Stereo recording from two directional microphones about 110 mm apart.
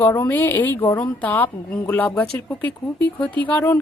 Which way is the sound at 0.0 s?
20° left (ahead or behind).